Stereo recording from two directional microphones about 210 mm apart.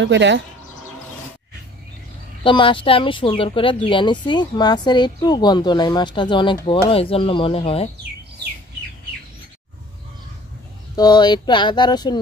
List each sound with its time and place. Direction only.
0.0 s speech: 60° right (ahead or behind)
2.4 s speech: 25° left (ahead or behind)
11.0 s speech: 20° left (ahead or behind)